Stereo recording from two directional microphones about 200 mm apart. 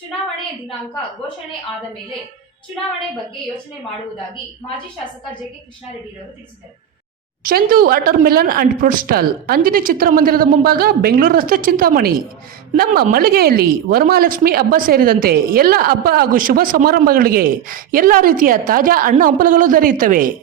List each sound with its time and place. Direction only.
7.4 s a woman's voice: 45° right (ahead or behind)